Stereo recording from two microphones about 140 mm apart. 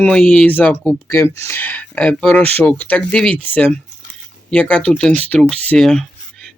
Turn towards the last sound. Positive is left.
turn(degrees=5)  # may be behind; listen again after turning